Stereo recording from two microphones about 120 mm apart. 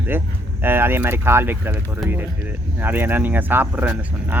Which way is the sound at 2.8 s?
15° right (ahead or behind).